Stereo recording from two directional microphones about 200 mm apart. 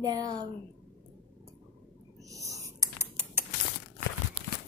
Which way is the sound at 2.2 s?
15° right (ahead or behind).